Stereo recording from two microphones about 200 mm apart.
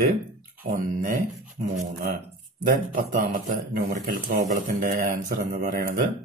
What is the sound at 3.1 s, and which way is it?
Speech, 45° right (ahead or behind).